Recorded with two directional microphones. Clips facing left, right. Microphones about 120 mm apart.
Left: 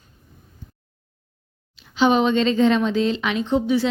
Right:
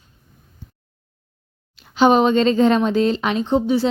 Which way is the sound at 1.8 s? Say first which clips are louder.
Right 3 dB; 45° right (ahead or behind).